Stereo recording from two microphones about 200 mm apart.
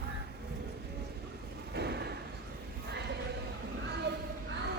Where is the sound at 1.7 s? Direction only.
55° right (ahead or behind).